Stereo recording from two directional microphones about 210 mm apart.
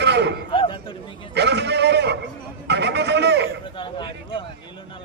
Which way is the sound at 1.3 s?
55° right (ahead or behind).